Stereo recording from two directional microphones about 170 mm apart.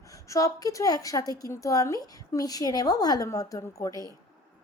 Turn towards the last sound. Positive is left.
turn(degrees=20)  # may be behind; listen again after turning